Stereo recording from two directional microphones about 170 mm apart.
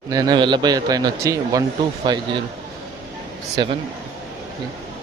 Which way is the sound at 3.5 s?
25° right (ahead or behind).